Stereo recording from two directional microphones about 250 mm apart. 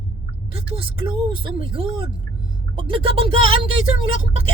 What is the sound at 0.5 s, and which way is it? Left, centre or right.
Speech, right.